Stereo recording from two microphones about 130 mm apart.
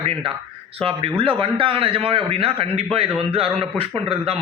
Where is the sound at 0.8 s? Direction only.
45° right (ahead or behind).